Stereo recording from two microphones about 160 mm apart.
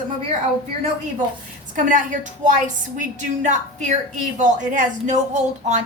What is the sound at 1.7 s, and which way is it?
Speech, 55° right (ahead or behind).